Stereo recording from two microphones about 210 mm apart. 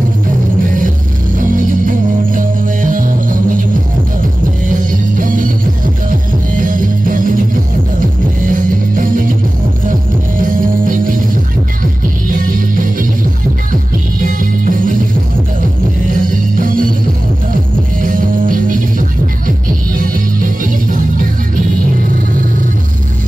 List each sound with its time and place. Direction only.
1.4 s music: 40° right (ahead or behind)
4.6 s music: 40° right (ahead or behind)
10.4 s music: 40° right (ahead or behind)
12.3 s music: 40° right (ahead or behind)
14.2 s music: 40° right (ahead or behind)
16.1 s music: 40° right (ahead or behind)
18.0 s music: 40° right (ahead or behind)